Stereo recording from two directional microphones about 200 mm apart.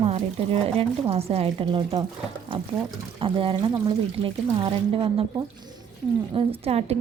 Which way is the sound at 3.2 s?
25° right (ahead or behind).